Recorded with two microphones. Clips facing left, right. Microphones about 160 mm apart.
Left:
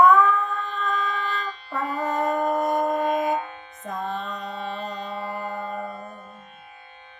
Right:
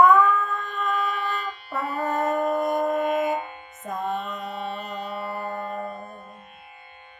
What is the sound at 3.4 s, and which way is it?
Music, 15° right (ahead or behind).